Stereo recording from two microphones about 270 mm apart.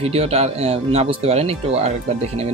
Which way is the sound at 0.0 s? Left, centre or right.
Right.